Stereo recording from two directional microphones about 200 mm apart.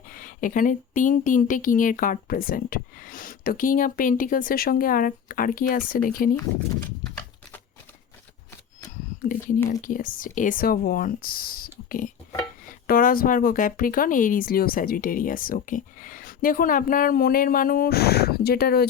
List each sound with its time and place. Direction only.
0.1 s speech: 45° left (ahead or behind)
9.8 s speech: 45° left (ahead or behind)